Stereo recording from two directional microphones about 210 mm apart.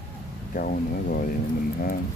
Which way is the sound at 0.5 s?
40° left (ahead or behind).